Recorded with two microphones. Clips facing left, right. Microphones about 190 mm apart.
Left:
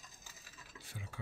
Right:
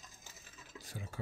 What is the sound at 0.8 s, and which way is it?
Stir, 40° right (ahead or behind).